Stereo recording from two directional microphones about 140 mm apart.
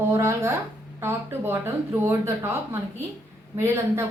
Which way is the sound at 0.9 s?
15° right (ahead or behind).